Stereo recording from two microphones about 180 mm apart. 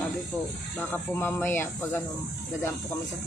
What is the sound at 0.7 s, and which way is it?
Speech, 10° left (ahead or behind).